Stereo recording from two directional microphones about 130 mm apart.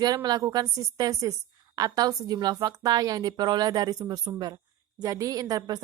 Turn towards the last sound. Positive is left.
turn(degrees=-30)  # may be behind; listen again after turning